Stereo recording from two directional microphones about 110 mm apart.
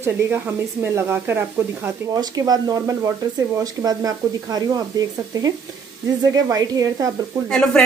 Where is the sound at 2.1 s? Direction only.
35° right (ahead or behind).